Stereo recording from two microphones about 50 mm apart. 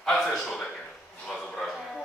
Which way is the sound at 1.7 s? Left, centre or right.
Centre.